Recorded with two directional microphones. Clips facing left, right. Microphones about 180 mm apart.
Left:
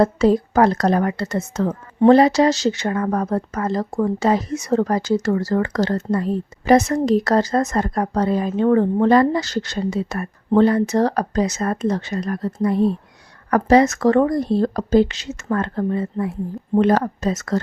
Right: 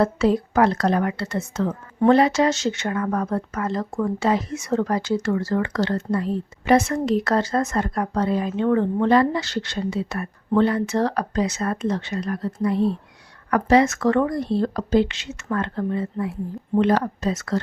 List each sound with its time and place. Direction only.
0.0 s speech: 40° left (ahead or behind)